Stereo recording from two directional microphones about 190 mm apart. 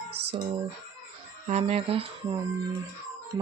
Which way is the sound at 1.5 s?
35° right (ahead or behind).